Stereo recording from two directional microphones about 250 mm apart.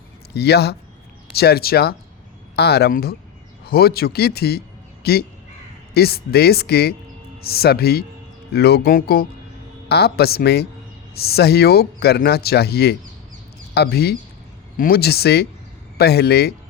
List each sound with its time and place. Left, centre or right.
0.3 s speech: left